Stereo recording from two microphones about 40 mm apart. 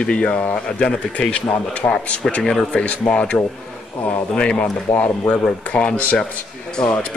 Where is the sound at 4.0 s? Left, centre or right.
Left.